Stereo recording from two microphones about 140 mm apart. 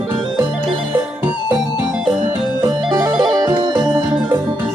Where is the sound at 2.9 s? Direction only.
30° right (ahead or behind).